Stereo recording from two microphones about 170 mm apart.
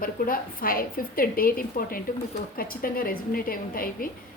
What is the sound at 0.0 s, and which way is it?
A woman's voice, 60° left (ahead or behind).